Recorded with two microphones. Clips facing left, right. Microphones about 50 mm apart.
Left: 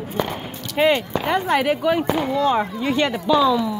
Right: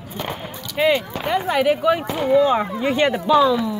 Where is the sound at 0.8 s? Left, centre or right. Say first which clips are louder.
Left 1 dB; centre.